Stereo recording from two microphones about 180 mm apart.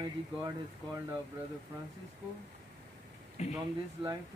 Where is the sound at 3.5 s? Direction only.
20° right (ahead or behind).